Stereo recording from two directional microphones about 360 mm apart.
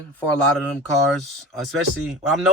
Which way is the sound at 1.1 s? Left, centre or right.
Centre.